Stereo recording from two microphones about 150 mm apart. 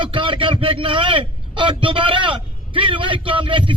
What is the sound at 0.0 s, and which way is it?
A man's voice, 35° right (ahead or behind).